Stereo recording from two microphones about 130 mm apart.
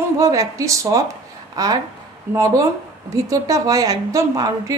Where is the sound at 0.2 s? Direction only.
25° right (ahead or behind).